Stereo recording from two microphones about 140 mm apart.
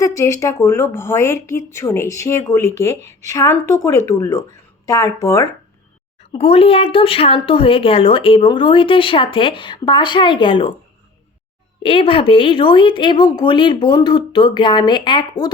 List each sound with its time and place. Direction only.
0.0 s speech: 20° left (ahead or behind)
6.3 s speech: 45° left (ahead or behind)
11.8 s speech: 40° left (ahead or behind)